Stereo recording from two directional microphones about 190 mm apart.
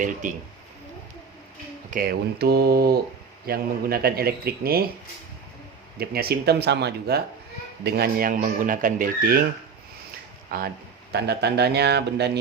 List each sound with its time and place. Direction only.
0.0 s speech: 45° right (ahead or behind)
1.9 s speech: 50° right (ahead or behind)
6.0 s speech: 55° right (ahead or behind)
10.5 s speech: 50° right (ahead or behind)